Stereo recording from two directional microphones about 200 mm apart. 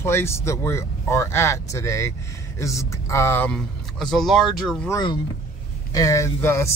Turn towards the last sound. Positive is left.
turn(degrees=15)  # may be behind; listen again after turning